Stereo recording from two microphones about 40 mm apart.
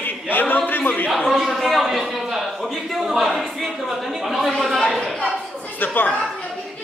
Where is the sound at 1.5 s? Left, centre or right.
Centre.